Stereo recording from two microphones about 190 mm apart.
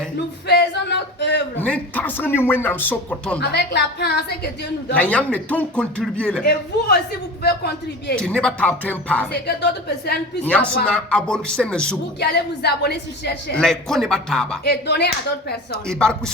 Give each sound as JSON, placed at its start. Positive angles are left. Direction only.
{"t": 0.4, "sound": "a woman's voice", "side_deg": 60}
{"t": 1.5, "sound": "speech", "side_deg": 10}
{"t": 3.5, "sound": "a woman's voice", "side_deg": 60}
{"t": 4.9, "sound": "speech", "side_deg": 5}
{"t": 6.4, "sound": "a woman's voice", "side_deg": 55}
{"t": 8.1, "sound": "speech", "side_deg": 5}
{"t": 9.3, "sound": "a woman's voice", "side_deg": 60}
{"t": 10.4, "sound": "a man's voice", "side_deg": 5}
{"t": 12.2, "sound": "a woman's voice", "side_deg": 60}
{"t": 13.6, "sound": "a man's voice", "side_deg": 5}
{"t": 14.6, "sound": "a woman's voice", "side_deg": 60}
{"t": 15.9, "sound": "a man's voice", "side_deg": 5}